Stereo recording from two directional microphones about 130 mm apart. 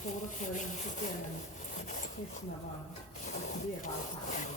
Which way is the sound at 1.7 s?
75° left (ahead or behind).